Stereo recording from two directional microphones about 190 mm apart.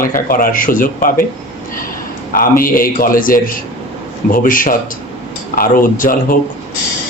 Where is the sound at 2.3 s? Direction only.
50° left (ahead or behind).